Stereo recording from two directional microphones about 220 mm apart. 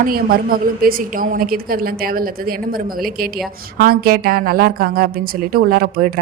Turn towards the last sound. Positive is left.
turn(degrees=-45)  # may be behind; listen again after turning